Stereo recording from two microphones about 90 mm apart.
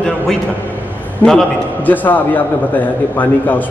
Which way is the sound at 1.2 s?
20° left (ahead or behind).